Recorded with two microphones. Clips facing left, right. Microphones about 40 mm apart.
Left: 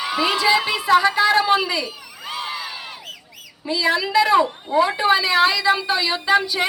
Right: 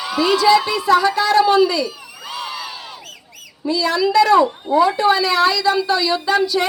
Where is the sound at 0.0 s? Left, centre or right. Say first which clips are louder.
Right 4 dB; left.